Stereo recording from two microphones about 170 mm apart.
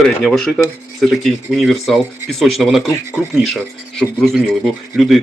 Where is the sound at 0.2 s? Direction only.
Centre (ahead or behind).